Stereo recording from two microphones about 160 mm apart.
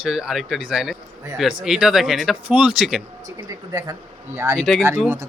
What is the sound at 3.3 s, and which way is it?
Speech, 20° right (ahead or behind).